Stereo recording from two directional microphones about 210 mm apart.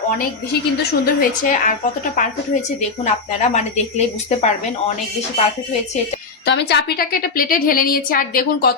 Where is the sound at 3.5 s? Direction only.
35° left (ahead or behind).